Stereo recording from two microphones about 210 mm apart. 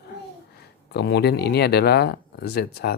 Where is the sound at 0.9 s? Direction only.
50° left (ahead or behind).